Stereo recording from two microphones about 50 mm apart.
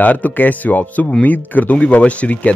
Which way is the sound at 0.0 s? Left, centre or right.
Left.